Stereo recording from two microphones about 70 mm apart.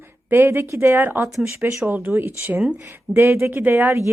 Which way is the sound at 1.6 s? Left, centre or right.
Right.